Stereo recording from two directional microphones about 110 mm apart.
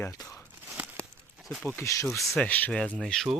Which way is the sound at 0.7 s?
15° right (ahead or behind).